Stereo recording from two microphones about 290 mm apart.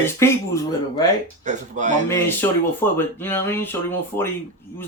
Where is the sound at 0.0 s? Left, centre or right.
Centre.